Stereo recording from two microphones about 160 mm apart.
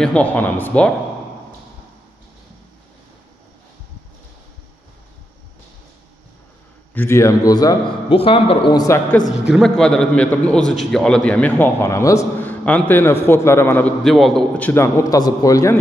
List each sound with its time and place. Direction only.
0.0 s a man's voice: 10° left (ahead or behind)
6.9 s a man's voice: 15° left (ahead or behind); by 8.8 s 30° left (ahead or behind)
8.8 s a man's voice: 15° left (ahead or behind)
9.4 s a man's voice: centre (ahead or behind)
14.7 s a man's voice: 15° left (ahead or behind)